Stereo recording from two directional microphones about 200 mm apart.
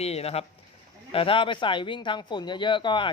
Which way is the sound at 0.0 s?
30° left (ahead or behind).